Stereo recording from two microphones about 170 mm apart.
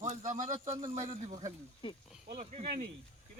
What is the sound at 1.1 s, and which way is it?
Speech, 25° right (ahead or behind).